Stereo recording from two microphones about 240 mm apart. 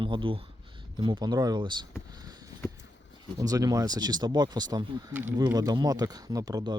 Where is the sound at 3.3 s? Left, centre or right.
Centre.